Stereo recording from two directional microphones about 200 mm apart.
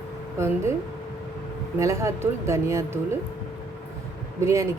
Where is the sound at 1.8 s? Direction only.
15° right (ahead or behind).